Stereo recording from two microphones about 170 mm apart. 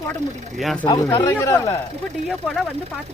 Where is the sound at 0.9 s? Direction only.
20° left (ahead or behind).